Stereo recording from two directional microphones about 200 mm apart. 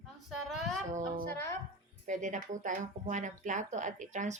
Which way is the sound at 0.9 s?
40° right (ahead or behind).